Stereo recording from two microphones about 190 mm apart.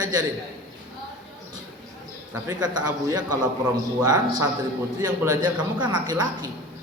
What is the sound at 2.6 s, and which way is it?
Speech, 20° right (ahead or behind).